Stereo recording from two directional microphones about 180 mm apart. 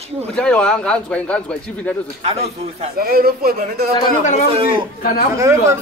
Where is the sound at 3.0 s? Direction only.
55° right (ahead or behind).